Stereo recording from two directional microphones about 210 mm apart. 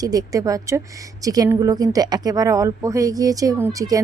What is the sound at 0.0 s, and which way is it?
A woman's voice, 15° right (ahead or behind).